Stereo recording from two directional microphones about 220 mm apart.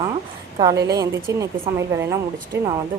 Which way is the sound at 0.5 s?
15° right (ahead or behind).